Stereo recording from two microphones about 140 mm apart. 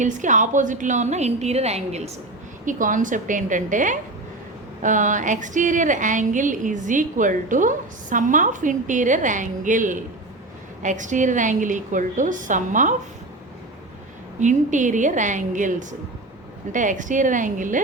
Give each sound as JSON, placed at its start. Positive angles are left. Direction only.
{"t": 0.0, "sound": "a woman's voice", "side_deg": -60}
{"t": 2.6, "sound": "a woman's voice", "side_deg": -70}
{"t": 14.3, "sound": "a woman's voice", "side_deg": -60}